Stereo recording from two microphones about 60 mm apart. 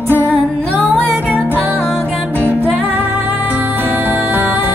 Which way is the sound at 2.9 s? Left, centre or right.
Right.